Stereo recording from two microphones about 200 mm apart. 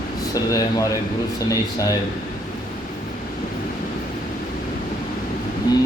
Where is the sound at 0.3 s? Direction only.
15° left (ahead or behind).